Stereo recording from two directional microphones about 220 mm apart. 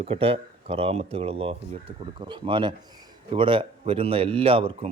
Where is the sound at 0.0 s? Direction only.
25° right (ahead or behind).